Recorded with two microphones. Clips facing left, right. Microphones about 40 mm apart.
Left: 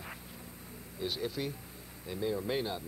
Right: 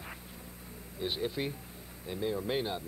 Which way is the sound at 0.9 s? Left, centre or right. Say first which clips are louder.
Right 2 dB; right.